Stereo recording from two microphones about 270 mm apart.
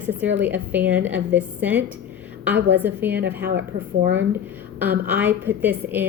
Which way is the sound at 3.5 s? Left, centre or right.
Right.